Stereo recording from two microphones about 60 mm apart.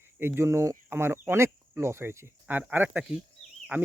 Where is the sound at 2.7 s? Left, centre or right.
Right.